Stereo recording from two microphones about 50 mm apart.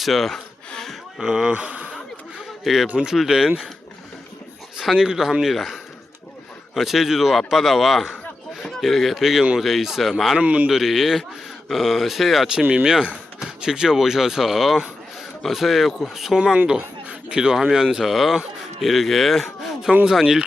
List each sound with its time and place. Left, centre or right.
0.0 s speech: centre
0.3 s a sound: centre
1.2 s speech: centre
2.8 s speech: centre
4.9 s speech: centre
10.3 s speech: right
10.7 s speech: centre
12.8 s speech: centre
17.1 s speech: centre